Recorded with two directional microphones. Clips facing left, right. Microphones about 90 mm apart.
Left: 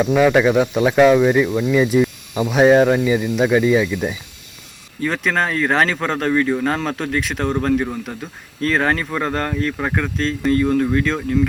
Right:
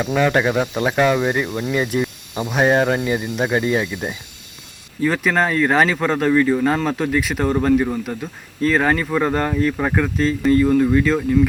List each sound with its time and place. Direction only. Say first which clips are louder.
0.0 s speech: left 4 dB; centre (ahead or behind)
4.9 s speech: right 2 dB; centre (ahead or behind)